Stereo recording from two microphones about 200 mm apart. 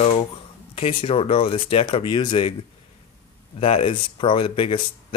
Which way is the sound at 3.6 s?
30° left (ahead or behind).